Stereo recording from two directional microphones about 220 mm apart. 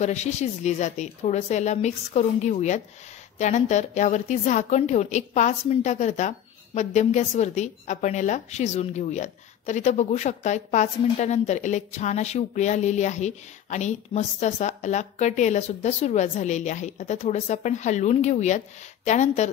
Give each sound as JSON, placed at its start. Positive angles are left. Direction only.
{"t": 0.0, "sound": "a woman's voice", "side_deg": 30}